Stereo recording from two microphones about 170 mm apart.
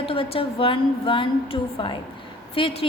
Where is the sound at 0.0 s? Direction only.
35° left (ahead or behind).